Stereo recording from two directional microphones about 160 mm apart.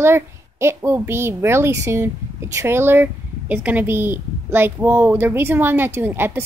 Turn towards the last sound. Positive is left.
turn(degrees=-15)  # may be behind; listen again after turning